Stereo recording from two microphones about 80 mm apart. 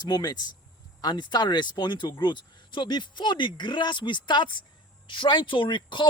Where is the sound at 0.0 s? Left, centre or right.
Left.